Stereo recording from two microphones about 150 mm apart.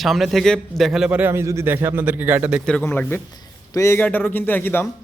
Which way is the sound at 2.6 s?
10° left (ahead or behind).